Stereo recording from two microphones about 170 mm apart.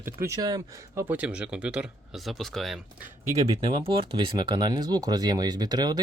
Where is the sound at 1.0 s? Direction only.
10° right (ahead or behind).